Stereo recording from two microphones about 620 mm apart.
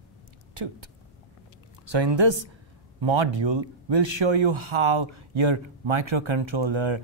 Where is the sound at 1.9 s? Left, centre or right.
Right.